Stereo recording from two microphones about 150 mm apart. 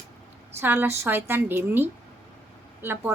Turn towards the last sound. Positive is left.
turn(degrees=-15)  # may be behind; listen again after turning